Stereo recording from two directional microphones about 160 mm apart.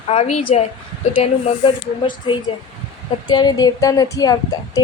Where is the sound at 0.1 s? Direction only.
40° left (ahead or behind).